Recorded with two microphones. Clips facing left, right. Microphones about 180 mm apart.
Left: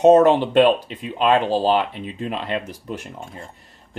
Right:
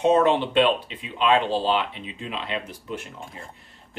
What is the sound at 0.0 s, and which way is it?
Speech, 45° left (ahead or behind).